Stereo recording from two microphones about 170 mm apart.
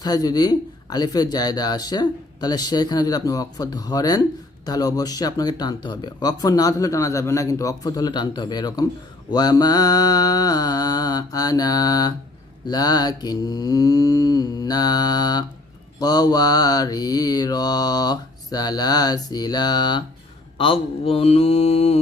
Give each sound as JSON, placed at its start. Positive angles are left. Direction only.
{"t": 0.0, "sound": "speech", "side_deg": 25}
{"t": 20.6, "sound": "mantra", "side_deg": 35}